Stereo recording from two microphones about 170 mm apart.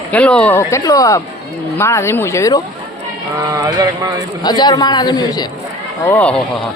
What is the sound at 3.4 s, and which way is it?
Speech, 20° right (ahead or behind).